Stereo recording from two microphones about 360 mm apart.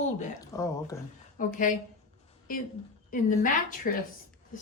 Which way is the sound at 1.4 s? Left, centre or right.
Left.